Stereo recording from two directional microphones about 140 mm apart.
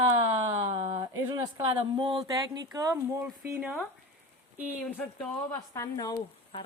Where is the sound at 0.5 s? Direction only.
25° right (ahead or behind).